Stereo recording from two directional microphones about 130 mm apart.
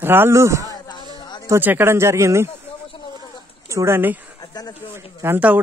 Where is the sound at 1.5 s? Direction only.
15° right (ahead or behind).